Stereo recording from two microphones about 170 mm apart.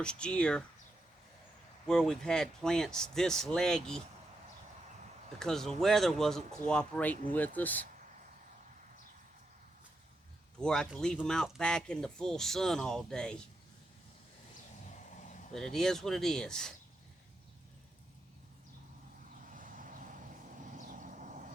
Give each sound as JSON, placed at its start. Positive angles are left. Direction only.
{"t": 0.0, "sound": "speech", "side_deg": 5}
{"t": 1.9, "sound": "speech", "side_deg": 5}
{"t": 5.4, "sound": "speech", "side_deg": 5}
{"t": 10.6, "sound": "speech", "side_deg": 5}
{"t": 15.5, "sound": "speech", "side_deg": 0}
{"t": 19.5, "sound": "vehicle", "side_deg": -50}
{"t": 20.7, "sound": "a sound", "side_deg": -50}